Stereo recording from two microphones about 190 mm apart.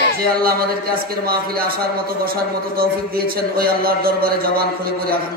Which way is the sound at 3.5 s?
50° right (ahead or behind).